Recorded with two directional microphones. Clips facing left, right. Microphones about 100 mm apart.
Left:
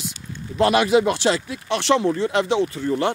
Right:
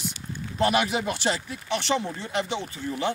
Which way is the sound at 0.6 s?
90° left.